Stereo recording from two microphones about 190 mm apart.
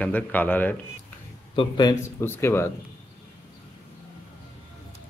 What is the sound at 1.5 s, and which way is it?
A man's voice, 25° left (ahead or behind).